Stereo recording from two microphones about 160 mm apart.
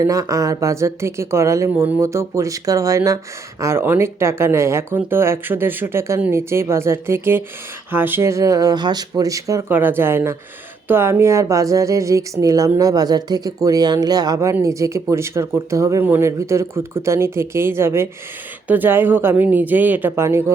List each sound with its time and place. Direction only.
0.0 s speech: 20° right (ahead or behind)